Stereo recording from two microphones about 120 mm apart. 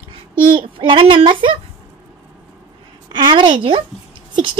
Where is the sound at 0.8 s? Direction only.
45° right (ahead or behind).